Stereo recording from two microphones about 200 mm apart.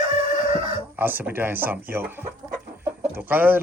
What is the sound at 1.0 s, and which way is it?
Speech, 10° right (ahead or behind).